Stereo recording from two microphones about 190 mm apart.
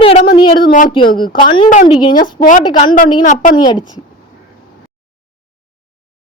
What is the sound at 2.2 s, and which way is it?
A woman's voice, 45° left (ahead or behind).